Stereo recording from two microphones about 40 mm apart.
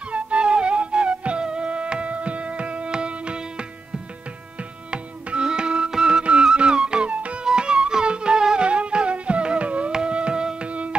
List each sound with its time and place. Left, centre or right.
0.1 s music: right
4.9 s music: right
8.6 s carnatic music: right
9.9 s music: right
10.7 s music: right